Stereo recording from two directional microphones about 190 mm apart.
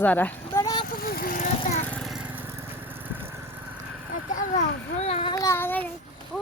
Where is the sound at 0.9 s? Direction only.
50° left (ahead or behind).